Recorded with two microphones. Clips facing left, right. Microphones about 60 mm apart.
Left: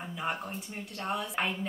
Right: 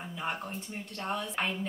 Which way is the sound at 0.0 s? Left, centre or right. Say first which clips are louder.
Left 1 dB; centre.